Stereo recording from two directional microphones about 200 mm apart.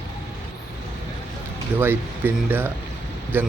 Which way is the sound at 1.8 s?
10° right (ahead or behind).